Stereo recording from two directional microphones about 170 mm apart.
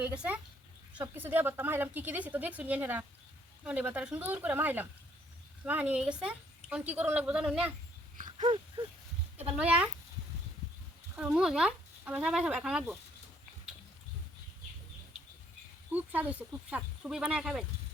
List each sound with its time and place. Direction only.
0.0 s a woman's voice: 10° right (ahead or behind)
8.1 s a sound: 50° right (ahead or behind)
8.4 s a sound: 30° right (ahead or behind)
9.6 s a woman's voice: 5° right (ahead or behind)
11.2 s speech: 5° right (ahead or behind)
15.9 s speech: 10° right (ahead or behind)